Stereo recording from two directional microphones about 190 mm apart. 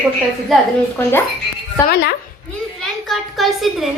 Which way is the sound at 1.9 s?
60° left (ahead or behind).